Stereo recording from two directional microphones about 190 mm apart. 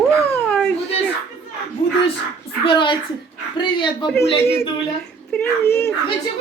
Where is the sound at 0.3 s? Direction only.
10° left (ahead or behind).